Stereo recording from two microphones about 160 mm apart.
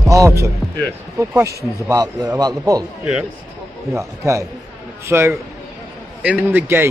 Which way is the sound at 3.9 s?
20° right (ahead or behind).